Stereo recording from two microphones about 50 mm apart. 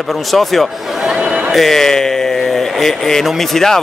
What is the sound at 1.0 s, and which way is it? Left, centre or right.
Speech, centre.